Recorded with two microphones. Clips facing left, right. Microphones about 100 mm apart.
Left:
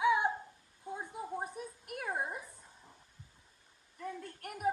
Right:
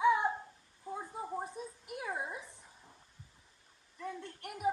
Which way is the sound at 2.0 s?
50° left (ahead or behind).